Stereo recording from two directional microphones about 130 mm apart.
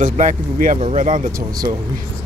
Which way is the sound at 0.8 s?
65° right (ahead or behind).